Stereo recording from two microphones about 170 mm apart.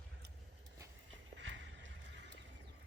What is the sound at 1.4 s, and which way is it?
Vehicle, 90° right.